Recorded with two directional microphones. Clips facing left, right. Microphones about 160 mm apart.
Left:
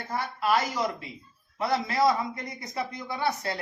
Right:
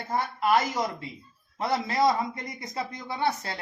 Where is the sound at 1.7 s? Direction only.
25° right (ahead or behind).